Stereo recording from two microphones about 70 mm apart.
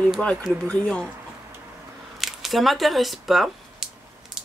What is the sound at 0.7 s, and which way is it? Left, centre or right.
Speech, centre.